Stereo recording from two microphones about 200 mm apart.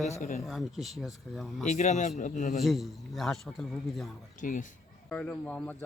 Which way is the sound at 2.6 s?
Centre (ahead or behind).